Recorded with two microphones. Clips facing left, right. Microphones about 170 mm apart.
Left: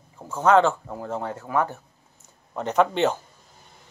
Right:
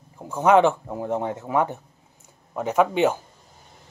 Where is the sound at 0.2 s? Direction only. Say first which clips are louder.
Right 1 dB; 15° right (ahead or behind).